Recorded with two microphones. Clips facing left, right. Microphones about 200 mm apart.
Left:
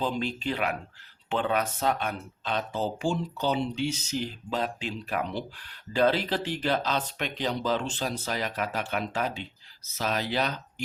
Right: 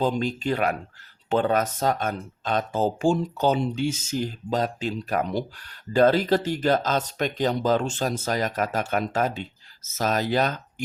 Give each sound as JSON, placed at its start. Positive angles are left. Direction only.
{"t": 0.0, "sound": "speech", "side_deg": -45}